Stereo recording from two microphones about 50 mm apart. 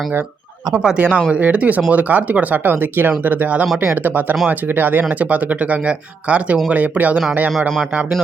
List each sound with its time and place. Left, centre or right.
0.9 s speech: right